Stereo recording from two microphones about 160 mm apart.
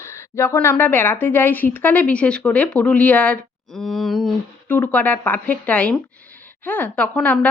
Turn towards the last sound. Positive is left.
turn(degrees=10)  # may be behind; listen again after turning